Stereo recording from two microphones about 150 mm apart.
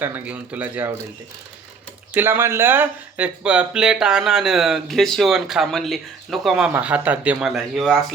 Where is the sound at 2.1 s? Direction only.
15° right (ahead or behind).